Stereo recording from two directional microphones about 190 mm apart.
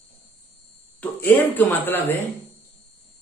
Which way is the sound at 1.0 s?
10° left (ahead or behind).